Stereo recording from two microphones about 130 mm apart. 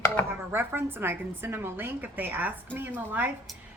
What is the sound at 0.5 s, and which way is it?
A woman's voice, 15° right (ahead or behind).